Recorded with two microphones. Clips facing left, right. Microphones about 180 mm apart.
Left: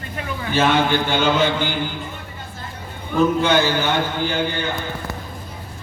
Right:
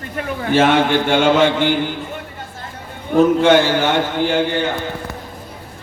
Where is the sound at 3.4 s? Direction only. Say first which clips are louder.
Right 5 dB; 85° right.